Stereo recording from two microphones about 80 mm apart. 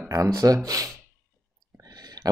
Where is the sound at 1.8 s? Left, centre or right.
Right.